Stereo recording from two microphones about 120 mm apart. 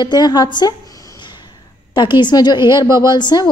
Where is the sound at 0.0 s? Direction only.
35° left (ahead or behind).